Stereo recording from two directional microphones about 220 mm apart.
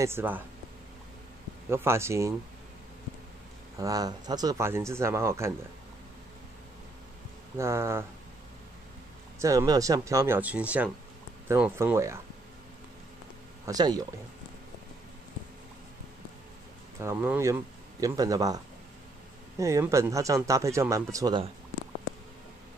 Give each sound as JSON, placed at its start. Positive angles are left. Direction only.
{"t": 0.0, "sound": "speech", "side_deg": -10}
{"t": 1.7, "sound": "speech", "side_deg": -10}
{"t": 3.7, "sound": "speech", "side_deg": -15}
{"t": 7.5, "sound": "speech", "side_deg": -10}
{"t": 9.4, "sound": "speech", "side_deg": -15}
{"t": 13.7, "sound": "speech", "side_deg": -15}
{"t": 17.0, "sound": "speech", "side_deg": -10}
{"t": 19.6, "sound": "speech", "side_deg": -15}